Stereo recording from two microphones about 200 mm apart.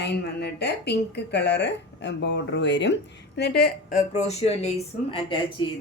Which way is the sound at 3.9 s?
35° left (ahead or behind).